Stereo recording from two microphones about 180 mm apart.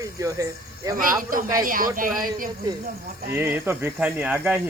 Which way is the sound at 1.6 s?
50° right (ahead or behind).